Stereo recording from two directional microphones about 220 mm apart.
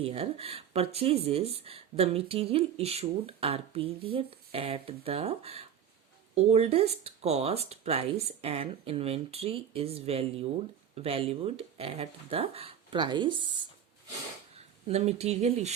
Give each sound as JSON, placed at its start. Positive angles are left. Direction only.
{"t": 0.0, "sound": "speech", "side_deg": -25}
{"t": 14.5, "sound": "speech", "side_deg": -30}